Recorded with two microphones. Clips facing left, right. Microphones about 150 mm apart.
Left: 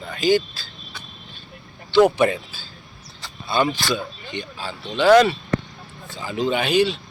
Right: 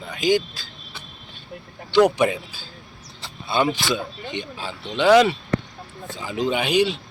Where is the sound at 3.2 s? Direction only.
25° right (ahead or behind).